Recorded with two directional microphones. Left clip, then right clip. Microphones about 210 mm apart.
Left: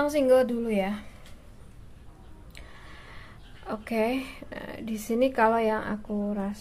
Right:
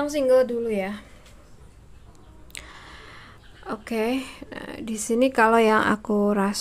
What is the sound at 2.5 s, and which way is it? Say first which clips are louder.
Speech: right 8 dB; 20° right (ahead or behind).